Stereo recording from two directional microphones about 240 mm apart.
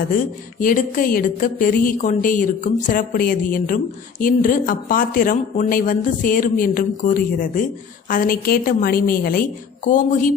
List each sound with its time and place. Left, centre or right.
0.6 s speech: left